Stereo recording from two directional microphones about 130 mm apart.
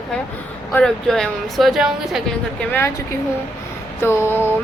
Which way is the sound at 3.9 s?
20° left (ahead or behind).